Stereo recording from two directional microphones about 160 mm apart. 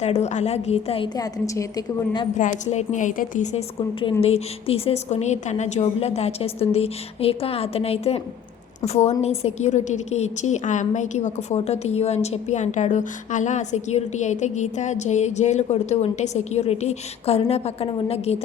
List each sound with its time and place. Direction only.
0.0 s a woman's voice: 45° left (ahead or behind); by 2.2 s 25° left (ahead or behind)
2.4 s a woman's voice: 45° left (ahead or behind)